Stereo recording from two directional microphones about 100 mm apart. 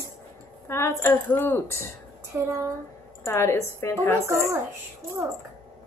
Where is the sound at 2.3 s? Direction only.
25° right (ahead or behind).